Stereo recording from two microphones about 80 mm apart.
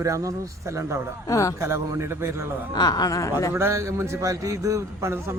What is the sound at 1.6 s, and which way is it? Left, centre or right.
Speech, right.